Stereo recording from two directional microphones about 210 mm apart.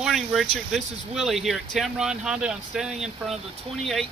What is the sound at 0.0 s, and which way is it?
Speech, centre (ahead or behind).